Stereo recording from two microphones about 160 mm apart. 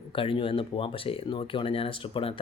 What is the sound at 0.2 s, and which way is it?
Speech, 35° left (ahead or behind).